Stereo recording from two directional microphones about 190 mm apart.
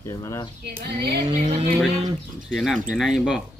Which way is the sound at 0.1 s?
20° left (ahead or behind).